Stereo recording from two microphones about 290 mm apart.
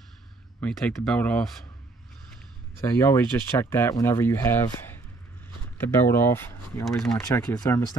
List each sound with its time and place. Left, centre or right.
0.6 s speech: centre
2.8 s speech: centre